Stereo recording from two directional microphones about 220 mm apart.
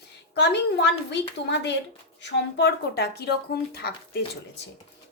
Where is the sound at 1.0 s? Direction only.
50° left (ahead or behind).